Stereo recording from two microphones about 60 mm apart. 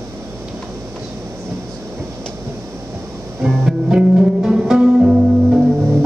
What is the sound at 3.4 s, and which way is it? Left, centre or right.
Music, centre.